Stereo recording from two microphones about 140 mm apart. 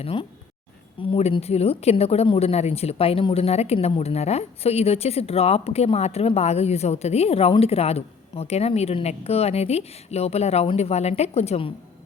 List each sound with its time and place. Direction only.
0.0 s a woman's voice: 40° left (ahead or behind)